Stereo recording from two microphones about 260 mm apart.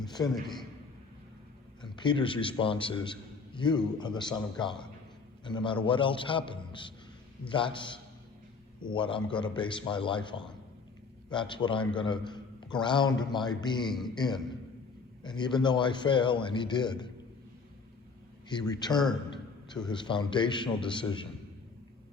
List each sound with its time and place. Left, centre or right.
0.3 s a man's voice: centre
1.8 s a man's voice: centre
18.4 s a man's voice: centre